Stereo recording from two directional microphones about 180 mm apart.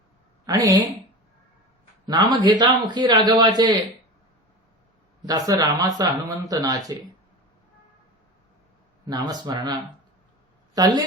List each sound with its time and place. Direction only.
0.4 s a woman's voice: 20° right (ahead or behind)
2.0 s speech: 25° right (ahead or behind)
5.2 s speech: 20° right (ahead or behind)
9.0 s speech: 25° right (ahead or behind)
10.8 s speech: 20° right (ahead or behind)